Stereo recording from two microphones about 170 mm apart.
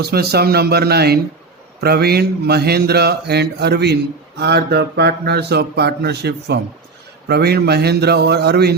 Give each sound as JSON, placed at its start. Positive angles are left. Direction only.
{"t": 0.0, "sound": "speech", "side_deg": -65}